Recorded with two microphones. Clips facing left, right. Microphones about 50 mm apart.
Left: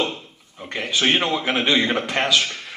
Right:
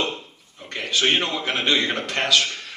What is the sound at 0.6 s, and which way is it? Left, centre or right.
A man's voice, centre.